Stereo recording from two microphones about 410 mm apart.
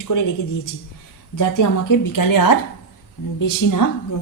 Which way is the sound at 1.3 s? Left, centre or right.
Left.